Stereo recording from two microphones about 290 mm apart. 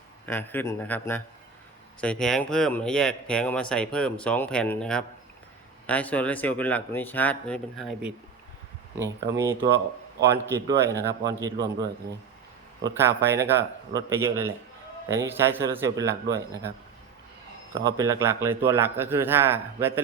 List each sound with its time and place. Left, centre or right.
0.3 s speech: centre
9.0 s a man's voice: centre
9.7 s speech: right
10.7 s a man's voice: centre
17.7 s a man's voice: centre